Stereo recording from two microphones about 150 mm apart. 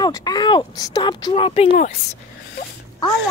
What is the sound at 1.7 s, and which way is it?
Speech, 55° left (ahead or behind).